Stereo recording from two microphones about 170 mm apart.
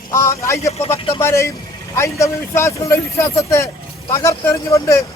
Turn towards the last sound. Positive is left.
turn(degrees=20)  # may be behind; listen again after turning